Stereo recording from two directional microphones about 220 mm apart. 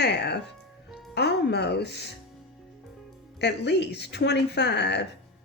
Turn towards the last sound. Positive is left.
turn(degrees=50)  # may be behind; listen again after turning